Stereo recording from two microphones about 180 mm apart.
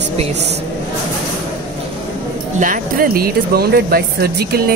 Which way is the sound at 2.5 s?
50° right (ahead or behind).